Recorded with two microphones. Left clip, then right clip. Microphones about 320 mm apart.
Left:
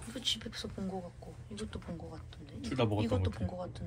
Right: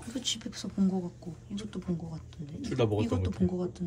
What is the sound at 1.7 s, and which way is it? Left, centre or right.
Speech, centre.